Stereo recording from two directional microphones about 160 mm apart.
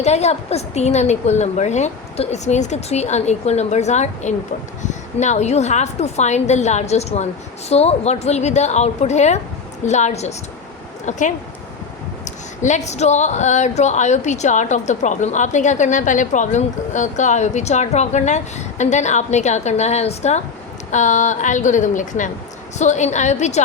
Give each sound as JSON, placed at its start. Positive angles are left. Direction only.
{"t": 0.0, "sound": "speech", "side_deg": 45}
{"t": 12.2, "sound": "speech", "side_deg": 50}